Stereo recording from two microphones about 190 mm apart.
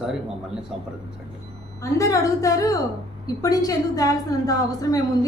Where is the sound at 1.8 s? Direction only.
15° left (ahead or behind).